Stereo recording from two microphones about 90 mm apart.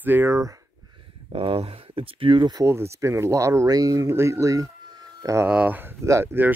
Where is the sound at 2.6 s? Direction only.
30° right (ahead or behind).